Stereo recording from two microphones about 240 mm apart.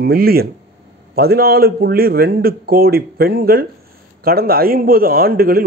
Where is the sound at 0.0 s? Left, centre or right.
Right.